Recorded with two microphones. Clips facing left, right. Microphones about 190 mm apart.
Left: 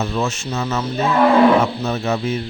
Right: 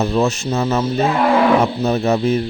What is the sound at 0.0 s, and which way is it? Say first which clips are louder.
Speech: right 5 dB; 35° right (ahead or behind).